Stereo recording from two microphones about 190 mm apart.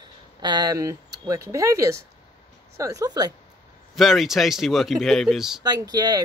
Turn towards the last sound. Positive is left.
turn(degrees=-20)  # may be behind; listen again after turning